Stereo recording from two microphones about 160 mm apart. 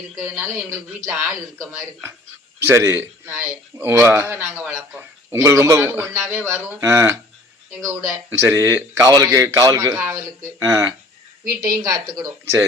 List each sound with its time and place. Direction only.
0.2 s a man's voice: 15° right (ahead or behind)